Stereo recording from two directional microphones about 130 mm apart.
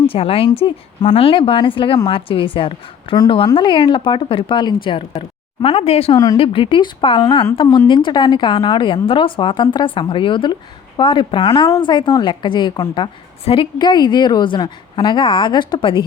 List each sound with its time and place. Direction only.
0.1 s a woman's voice: 45° left (ahead or behind); by 7.5 s 30° left (ahead or behind)
7.5 s a woman's voice: 40° left (ahead or behind)